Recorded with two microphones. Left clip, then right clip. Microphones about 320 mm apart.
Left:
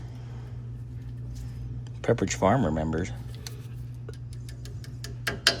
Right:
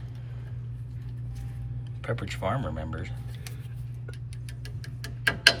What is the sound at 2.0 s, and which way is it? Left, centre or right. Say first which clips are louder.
Speech: left 8 dB; centre.